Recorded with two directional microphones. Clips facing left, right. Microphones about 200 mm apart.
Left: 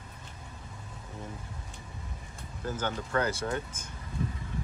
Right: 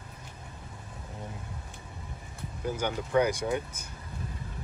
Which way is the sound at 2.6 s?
15° right (ahead or behind).